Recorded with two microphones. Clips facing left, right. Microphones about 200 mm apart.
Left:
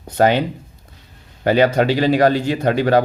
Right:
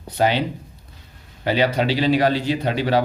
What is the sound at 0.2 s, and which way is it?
Speech, 50° left (ahead or behind).